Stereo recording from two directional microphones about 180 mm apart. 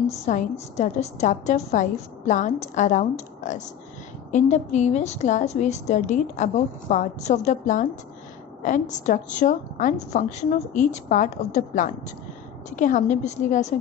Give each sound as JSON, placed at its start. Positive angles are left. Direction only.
{"t": 0.2, "sound": "a woman's voice", "side_deg": 40}